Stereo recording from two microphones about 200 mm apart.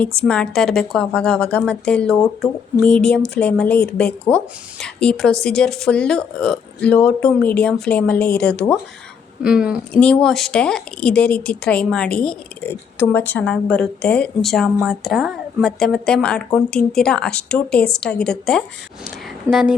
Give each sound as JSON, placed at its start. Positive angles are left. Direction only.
{"t": 0.0, "sound": "speech", "side_deg": 5}
{"t": 9.4, "sound": "speech", "side_deg": -5}